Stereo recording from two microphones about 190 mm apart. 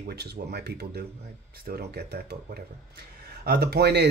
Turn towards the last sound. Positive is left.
turn(degrees=-60)  # may be behind; listen again after turning